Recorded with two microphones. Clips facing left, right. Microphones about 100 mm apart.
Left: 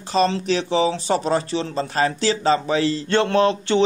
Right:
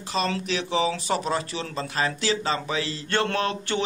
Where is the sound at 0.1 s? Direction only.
35° left (ahead or behind).